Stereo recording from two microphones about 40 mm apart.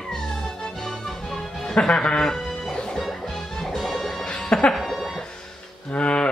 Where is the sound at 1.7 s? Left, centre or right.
Left.